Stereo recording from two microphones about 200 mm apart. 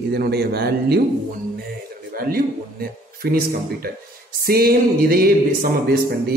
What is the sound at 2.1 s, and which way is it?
A man's voice, 45° right (ahead or behind).